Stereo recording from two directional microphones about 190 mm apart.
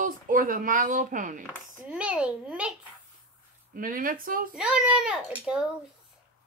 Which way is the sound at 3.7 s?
45° right (ahead or behind).